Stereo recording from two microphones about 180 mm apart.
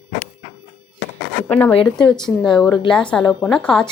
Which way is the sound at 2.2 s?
25° left (ahead or behind).